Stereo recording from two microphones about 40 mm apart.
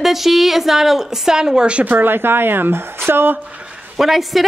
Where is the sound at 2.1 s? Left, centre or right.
Right.